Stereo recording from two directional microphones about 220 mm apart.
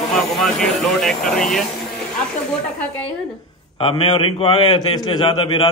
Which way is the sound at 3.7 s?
25° left (ahead or behind).